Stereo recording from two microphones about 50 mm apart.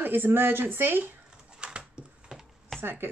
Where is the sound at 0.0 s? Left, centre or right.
Right.